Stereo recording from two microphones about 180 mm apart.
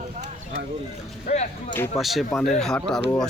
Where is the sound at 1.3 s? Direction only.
40° left (ahead or behind).